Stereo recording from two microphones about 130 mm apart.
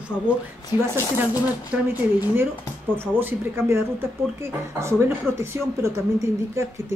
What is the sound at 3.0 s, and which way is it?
Speech, 15° right (ahead or behind).